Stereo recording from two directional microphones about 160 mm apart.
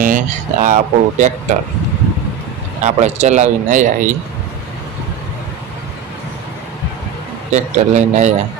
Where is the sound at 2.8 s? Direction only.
45° right (ahead or behind).